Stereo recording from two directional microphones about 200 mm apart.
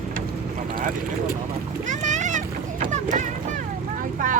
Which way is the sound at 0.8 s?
45° right (ahead or behind).